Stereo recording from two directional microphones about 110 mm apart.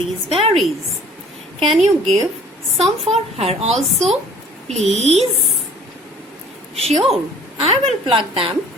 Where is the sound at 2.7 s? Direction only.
65° right (ahead or behind).